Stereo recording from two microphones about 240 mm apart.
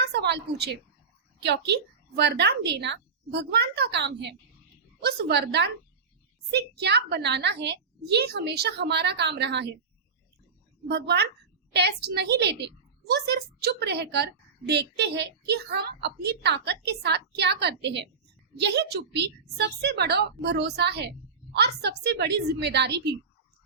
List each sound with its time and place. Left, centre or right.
0.0 s a sound: right
1.4 s a woman's voice: right
10.8 s a woman's voice: right